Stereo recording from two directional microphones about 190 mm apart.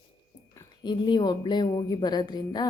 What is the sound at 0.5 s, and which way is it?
A woman's voice, 25° left (ahead or behind).